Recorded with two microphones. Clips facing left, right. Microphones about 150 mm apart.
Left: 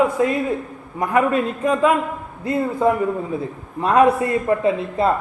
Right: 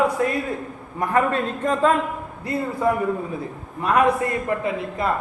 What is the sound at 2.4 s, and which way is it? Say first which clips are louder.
A man's voice: left 4 dB; 20° left (ahead or behind).